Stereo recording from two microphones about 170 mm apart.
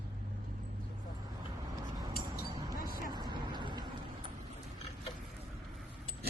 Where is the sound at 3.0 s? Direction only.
25° right (ahead or behind).